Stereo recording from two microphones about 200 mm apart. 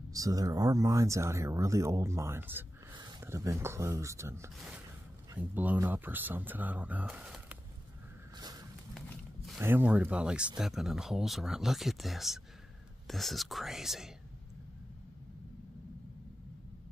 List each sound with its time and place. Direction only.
0.1 s speech: 15° right (ahead or behind)
2.9 s speech: 20° right (ahead or behind)
4.6 s a sound: 5° right (ahead or behind)
5.4 s speech: 10° right (ahead or behind)
8.4 s a sound: 20° right (ahead or behind)
9.6 s speech: 10° right (ahead or behind)